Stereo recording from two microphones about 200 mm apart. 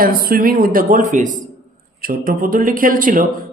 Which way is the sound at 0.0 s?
45° right (ahead or behind).